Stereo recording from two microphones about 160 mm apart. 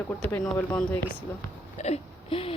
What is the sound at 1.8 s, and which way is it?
Whimper, 40° left (ahead or behind).